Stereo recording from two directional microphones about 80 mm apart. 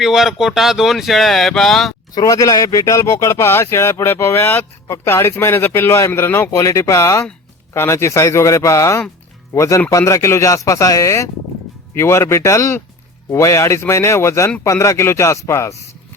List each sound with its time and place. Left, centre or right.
0.0 s speech: centre
2.1 s speech: left
6.5 s speech: left